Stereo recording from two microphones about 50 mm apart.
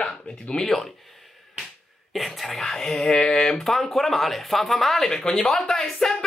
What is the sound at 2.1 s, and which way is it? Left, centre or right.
Speech, centre.